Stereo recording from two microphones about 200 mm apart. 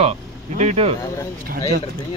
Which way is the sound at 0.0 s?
35° right (ahead or behind).